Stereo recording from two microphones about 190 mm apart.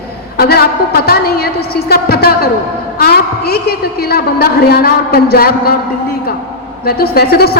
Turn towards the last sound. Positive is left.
turn(degrees=55)  # may be behind; listen again after turning